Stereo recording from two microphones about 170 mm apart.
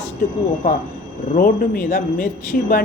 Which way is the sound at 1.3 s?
60° left (ahead or behind).